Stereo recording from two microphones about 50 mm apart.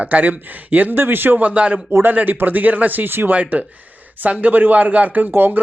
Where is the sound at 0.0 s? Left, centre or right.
Right.